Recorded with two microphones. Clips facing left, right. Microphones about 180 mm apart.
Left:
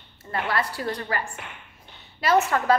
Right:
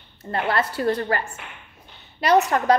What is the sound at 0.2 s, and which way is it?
Speech, 25° right (ahead or behind).